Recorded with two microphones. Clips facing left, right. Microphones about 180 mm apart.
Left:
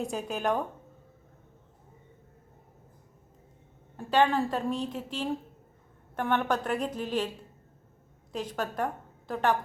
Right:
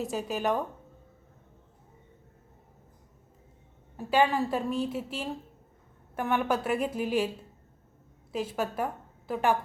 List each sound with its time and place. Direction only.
0.0 s speech: centre (ahead or behind)
3.9 s a woman's voice: 5° right (ahead or behind)
8.3 s a woman's voice: 5° right (ahead or behind)